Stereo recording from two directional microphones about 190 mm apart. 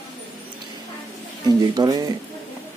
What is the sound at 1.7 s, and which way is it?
Speech, 20° right (ahead or behind).